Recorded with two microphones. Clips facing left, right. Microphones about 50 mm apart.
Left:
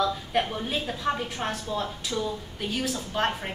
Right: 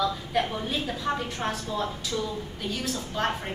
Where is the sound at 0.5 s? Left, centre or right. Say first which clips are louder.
Even; centre.